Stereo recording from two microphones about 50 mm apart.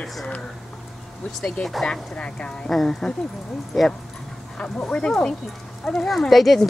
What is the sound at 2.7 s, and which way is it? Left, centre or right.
Speech, centre.